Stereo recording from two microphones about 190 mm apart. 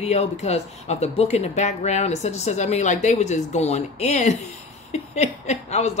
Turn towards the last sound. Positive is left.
turn(degrees=35)  # may be behind; listen again after turning